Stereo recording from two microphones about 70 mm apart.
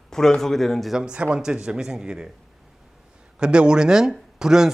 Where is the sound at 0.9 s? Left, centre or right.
Centre.